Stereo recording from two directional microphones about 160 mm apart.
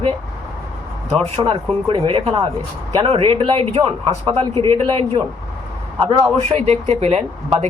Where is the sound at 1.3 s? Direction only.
30° right (ahead or behind).